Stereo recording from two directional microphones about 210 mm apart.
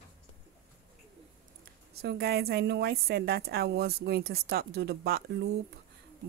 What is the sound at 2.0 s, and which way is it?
Speech, 50° right (ahead or behind).